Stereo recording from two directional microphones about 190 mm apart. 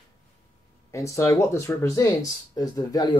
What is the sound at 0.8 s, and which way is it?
Speech, 15° left (ahead or behind).